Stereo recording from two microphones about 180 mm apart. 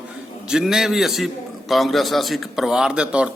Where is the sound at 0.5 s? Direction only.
5° right (ahead or behind).